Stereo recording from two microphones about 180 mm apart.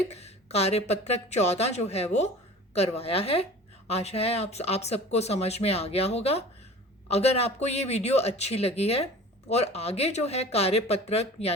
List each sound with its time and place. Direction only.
0.1 s speech: 35° left (ahead or behind)